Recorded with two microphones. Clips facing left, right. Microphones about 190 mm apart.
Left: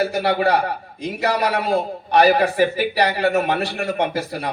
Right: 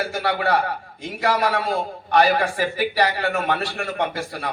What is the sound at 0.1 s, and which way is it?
A man's voice, 25° left (ahead or behind).